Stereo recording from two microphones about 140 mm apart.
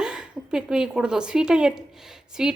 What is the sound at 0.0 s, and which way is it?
A woman's voice, 5° right (ahead or behind).